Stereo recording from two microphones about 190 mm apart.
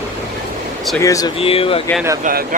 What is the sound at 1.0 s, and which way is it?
Speech, 15° left (ahead or behind).